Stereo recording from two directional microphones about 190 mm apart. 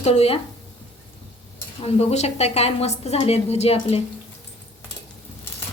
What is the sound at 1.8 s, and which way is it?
A woman's voice, 35° left (ahead or behind).